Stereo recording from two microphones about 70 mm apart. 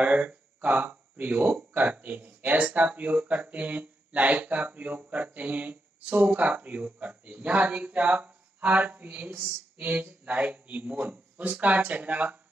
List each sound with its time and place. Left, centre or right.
0.0 s speech: centre